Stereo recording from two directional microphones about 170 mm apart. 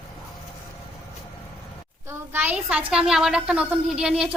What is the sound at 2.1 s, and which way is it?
A woman's voice, 10° right (ahead or behind).